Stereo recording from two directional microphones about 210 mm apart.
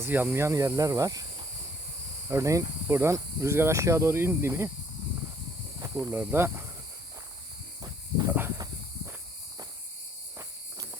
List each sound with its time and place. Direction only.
0.0 s speech: 10° right (ahead or behind)
5.8 s speech: 10° right (ahead or behind)
7.8 s cricket: 15° right (ahead or behind)